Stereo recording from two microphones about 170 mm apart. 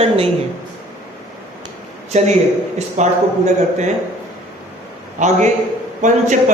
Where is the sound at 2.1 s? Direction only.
40° right (ahead or behind).